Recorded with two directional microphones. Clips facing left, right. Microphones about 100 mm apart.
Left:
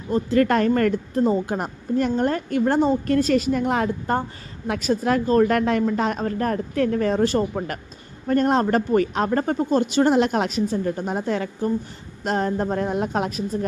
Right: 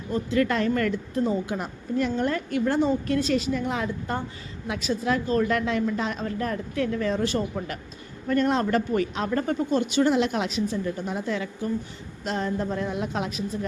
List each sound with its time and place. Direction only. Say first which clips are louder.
0.1 s a woman's voice: left 5 dB; 45° left (ahead or behind)